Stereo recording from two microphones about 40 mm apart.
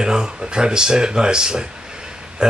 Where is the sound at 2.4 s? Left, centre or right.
Centre.